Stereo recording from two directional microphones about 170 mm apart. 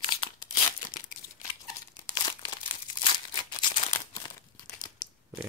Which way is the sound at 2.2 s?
30° left (ahead or behind).